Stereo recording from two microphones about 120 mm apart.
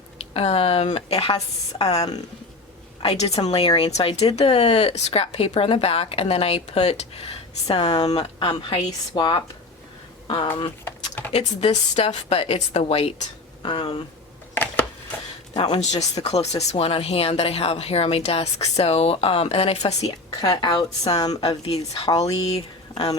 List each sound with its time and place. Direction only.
0.3 s a woman's voice: 55° left (ahead or behind)
1.9 s a woman's voice: 30° left (ahead or behind)
3.0 s speech: 60° left (ahead or behind)
3.7 s a woman's voice: 35° left (ahead or behind)
4.0 s a woman's voice: 60° left (ahead or behind); by 10.5 s 45° left (ahead or behind)
11.3 s a woman's voice: 55° left (ahead or behind)
14.5 s a sound: 15° left (ahead or behind)
15.5 s a woman's voice: 40° left (ahead or behind)
15.8 s speech: 70° left (ahead or behind); by 19.8 s 55° left (ahead or behind)
20.4 s a woman's voice: 35° left (ahead or behind)
21.6 s speech: 55° left (ahead or behind)